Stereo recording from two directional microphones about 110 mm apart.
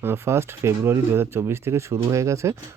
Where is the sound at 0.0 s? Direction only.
20° right (ahead or behind).